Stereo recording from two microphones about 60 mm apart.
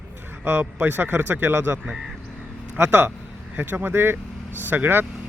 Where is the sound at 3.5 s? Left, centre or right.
Right.